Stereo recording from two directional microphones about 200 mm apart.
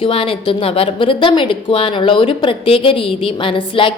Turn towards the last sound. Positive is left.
turn(degrees=25)  # may be behind; listen again after turning